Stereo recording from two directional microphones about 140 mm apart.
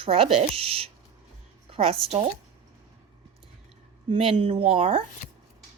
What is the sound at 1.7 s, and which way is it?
Speech, 45° right (ahead or behind).